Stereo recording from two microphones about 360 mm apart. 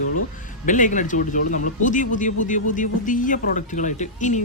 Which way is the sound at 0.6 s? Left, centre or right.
Left.